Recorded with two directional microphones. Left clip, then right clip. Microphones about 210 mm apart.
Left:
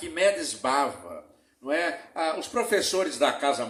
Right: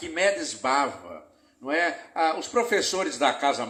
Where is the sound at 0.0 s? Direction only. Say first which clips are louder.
Even; 30° right (ahead or behind).